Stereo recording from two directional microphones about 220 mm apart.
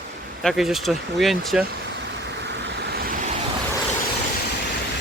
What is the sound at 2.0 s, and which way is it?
Vehicle, 50° right (ahead or behind).